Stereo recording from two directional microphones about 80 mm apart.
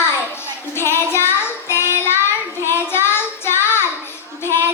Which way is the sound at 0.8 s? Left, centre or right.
Left.